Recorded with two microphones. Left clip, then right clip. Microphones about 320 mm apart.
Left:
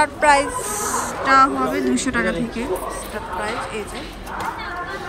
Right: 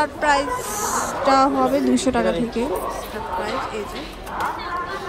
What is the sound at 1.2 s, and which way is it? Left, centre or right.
A woman's voice, centre.